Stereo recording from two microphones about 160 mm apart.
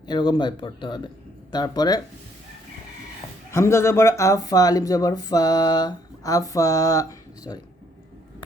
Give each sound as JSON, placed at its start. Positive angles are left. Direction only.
{"t": 0.1, "sound": "speech", "side_deg": 30}
{"t": 3.5, "sound": "speech", "side_deg": 15}